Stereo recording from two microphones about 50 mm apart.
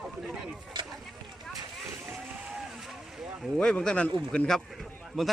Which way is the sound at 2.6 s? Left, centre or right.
Centre.